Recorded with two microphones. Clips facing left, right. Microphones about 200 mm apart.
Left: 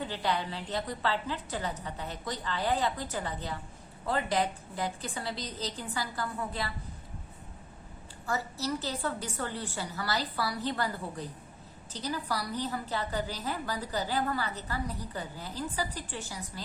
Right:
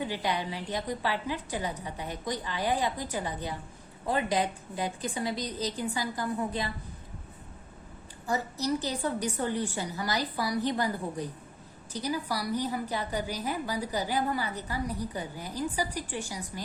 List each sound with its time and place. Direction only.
0.0 s a woman's voice: 15° right (ahead or behind)
8.3 s a woman's voice: 15° right (ahead or behind)